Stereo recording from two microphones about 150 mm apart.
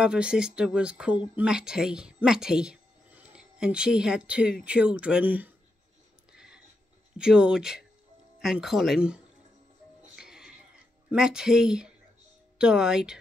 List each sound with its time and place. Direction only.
0.0 s speech: 5° right (ahead or behind)
7.2 s speech: 5° right (ahead or behind)
10.1 s music: 5° right (ahead or behind)
11.1 s speech: 5° right (ahead or behind)